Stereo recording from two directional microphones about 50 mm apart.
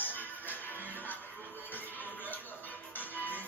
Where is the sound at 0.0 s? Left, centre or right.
Left.